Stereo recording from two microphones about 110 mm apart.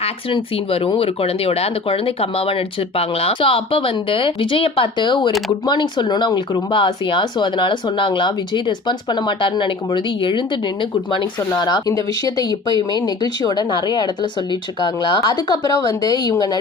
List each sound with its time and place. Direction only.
0.0 s speech: 55° left (ahead or behind); by 16.6 s 35° left (ahead or behind)